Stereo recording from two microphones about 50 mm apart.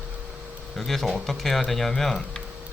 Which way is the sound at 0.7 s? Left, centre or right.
Centre.